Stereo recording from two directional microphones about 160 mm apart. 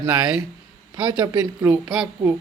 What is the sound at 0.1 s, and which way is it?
Speech, 5° right (ahead or behind).